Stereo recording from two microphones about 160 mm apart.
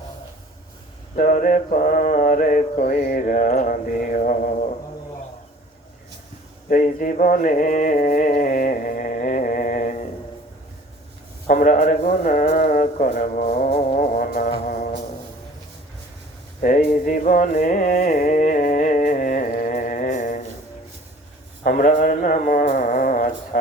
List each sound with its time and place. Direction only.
1.1 s mantra: 60° left (ahead or behind)
6.7 s mantra: 55° left (ahead or behind)
11.4 s a man's voice: 55° left (ahead or behind)
16.6 s music: 55° left (ahead or behind)
21.6 s a sound: 55° left (ahead or behind)